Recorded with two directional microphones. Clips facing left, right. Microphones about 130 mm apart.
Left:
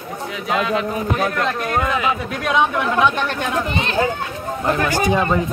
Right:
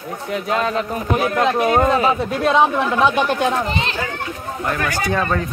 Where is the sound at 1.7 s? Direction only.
35° right (ahead or behind).